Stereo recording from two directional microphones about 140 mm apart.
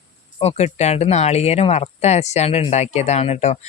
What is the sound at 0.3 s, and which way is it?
Speech, 50° left (ahead or behind).